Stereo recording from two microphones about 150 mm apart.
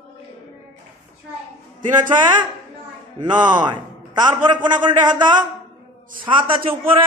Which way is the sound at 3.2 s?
30° right (ahead or behind).